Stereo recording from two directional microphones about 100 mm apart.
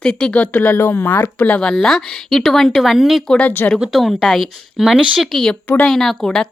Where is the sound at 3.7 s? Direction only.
5° right (ahead or behind).